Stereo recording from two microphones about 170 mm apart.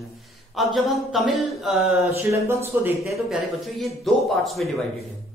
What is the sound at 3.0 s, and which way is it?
A man's voice, centre (ahead or behind).